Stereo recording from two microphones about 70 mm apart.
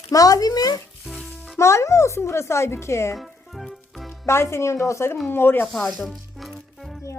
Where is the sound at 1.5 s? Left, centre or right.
Left.